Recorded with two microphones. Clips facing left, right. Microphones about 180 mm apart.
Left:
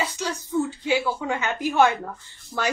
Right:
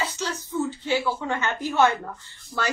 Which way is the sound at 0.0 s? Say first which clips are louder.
Left 1 dB; 15° left (ahead or behind).